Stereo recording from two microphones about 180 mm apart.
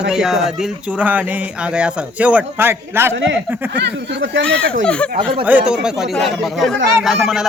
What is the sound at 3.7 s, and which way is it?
Speech, 70° right (ahead or behind).